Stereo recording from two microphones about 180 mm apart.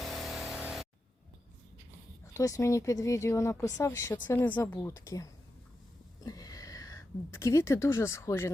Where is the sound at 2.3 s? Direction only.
20° left (ahead or behind).